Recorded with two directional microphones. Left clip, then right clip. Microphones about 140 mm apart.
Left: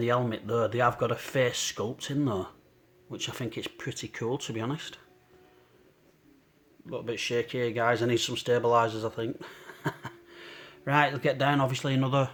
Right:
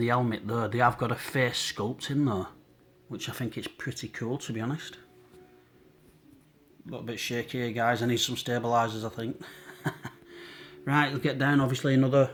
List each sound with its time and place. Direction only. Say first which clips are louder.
0.0 s speech: even; 20° left (ahead or behind)
6.9 s speech: left 4 dB; 30° left (ahead or behind)